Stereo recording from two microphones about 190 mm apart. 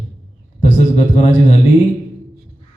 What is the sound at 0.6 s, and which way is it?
Speech, 35° left (ahead or behind).